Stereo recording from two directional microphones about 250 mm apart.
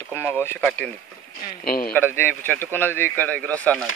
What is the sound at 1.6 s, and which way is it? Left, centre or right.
Speech, left.